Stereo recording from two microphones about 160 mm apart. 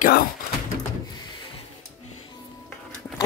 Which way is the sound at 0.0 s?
70° left (ahead or behind).